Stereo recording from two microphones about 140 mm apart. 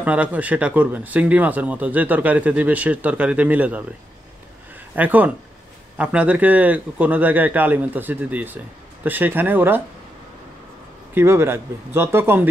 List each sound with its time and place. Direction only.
0.0 s speech: 10° right (ahead or behind)
4.9 s speech: 10° right (ahead or behind)
11.1 s speech: 15° right (ahead or behind)